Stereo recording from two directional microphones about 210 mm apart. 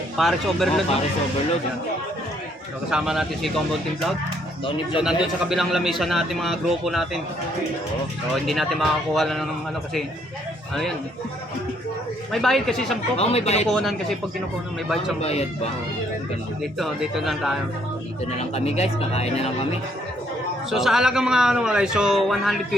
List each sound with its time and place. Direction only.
0.2 s a man's voice: centre (ahead or behind)
2.9 s a man's voice: centre (ahead or behind)
4.9 s a man's voice: centre (ahead or behind)
8.4 s a man's voice: centre (ahead or behind)
12.3 s a man's voice: centre (ahead or behind)
13.1 s speech: 30° left (ahead or behind)
13.7 s a man's voice: centre (ahead or behind)
15.2 s speech: 30° left (ahead or behind)
16.7 s a man's voice: centre (ahead or behind)
18.3 s speech: 30° left (ahead or behind)
20.7 s a man's voice: centre (ahead or behind)